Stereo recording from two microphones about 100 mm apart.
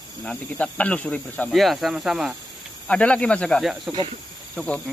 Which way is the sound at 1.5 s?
Centre (ahead or behind).